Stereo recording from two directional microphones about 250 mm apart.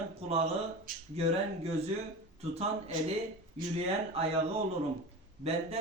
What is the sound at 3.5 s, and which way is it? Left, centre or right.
Speech, right.